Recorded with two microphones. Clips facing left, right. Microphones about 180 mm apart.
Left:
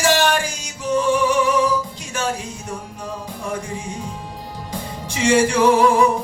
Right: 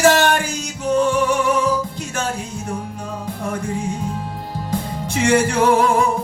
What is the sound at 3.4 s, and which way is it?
Music, 55° right (ahead or behind).